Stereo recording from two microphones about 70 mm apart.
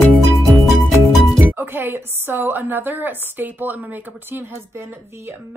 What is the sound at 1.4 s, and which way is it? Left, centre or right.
A woman's voice, right.